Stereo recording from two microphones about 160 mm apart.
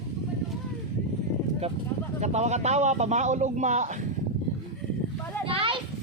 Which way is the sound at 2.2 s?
45° right (ahead or behind).